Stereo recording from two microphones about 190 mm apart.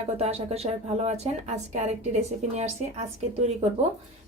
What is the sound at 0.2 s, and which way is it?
A woman's voice, 35° right (ahead or behind).